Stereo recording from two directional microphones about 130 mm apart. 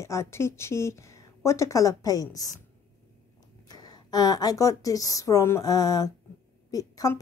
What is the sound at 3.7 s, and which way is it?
A woman's voice, 30° left (ahead or behind).